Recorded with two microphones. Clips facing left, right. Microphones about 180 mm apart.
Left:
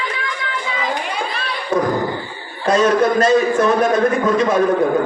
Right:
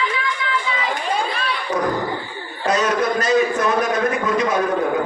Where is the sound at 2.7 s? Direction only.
30° left (ahead or behind).